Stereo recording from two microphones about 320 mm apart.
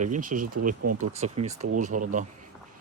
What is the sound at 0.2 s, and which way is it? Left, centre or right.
Speech, right.